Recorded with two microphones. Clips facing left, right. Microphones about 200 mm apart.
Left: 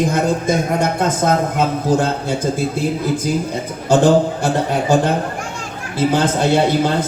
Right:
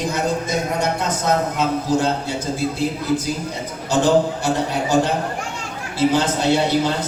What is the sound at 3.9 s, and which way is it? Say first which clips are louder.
Speech: left 4 dB; 55° left (ahead or behind).